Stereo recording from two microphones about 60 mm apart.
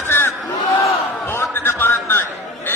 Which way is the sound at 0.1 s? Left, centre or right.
Left.